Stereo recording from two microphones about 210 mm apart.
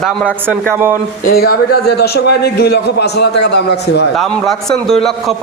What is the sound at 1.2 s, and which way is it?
A man's voice, 45° left (ahead or behind).